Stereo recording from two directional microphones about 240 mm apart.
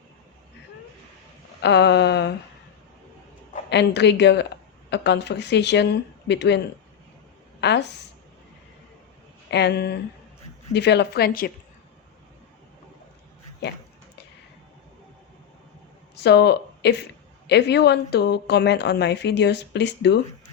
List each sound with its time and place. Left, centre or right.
1.6 s speech: left
3.7 s speech: left
7.6 s a woman's voice: left
9.5 s speech: left
16.2 s speech: left